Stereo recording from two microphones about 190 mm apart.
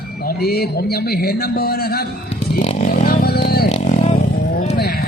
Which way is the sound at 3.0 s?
55° left (ahead or behind).